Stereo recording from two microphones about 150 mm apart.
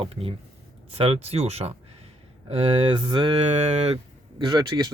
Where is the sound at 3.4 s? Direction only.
50° right (ahead or behind).